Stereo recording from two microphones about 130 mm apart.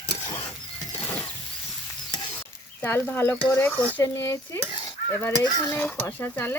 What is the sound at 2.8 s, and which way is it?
Dishes, 15° left (ahead or behind).